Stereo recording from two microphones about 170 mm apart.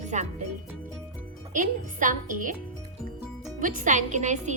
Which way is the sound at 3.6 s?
50° right (ahead or behind).